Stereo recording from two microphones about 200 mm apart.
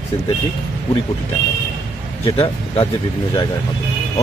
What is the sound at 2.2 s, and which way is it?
Speech, 30° left (ahead or behind).